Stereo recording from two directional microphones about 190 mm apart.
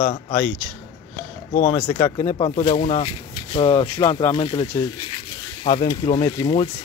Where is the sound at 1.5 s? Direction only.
40° left (ahead or behind).